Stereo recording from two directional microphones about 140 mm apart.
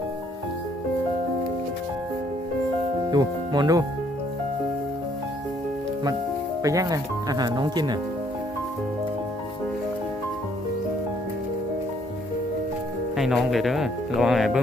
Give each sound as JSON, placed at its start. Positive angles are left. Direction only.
{"t": 3.1, "sound": "speech", "side_deg": -30}
{"t": 6.6, "sound": "speech", "side_deg": -25}
{"t": 13.1, "sound": "speech", "side_deg": 0}